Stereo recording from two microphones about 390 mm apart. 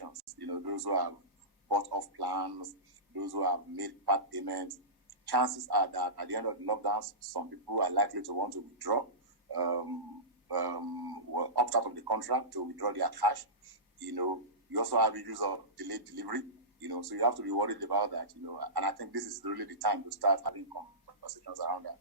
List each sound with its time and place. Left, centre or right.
0.0 s a man's voice: right